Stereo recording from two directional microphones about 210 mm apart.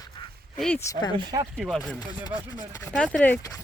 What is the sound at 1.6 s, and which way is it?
Speech, centre (ahead or behind).